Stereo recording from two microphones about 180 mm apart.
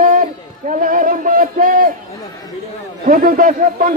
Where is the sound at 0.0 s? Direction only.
50° right (ahead or behind).